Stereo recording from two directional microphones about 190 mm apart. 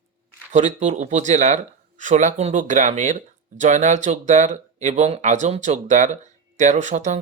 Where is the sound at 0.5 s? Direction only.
40° right (ahead or behind).